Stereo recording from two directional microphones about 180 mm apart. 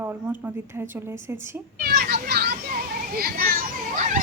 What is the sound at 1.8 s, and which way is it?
A child's voice, 65° right (ahead or behind).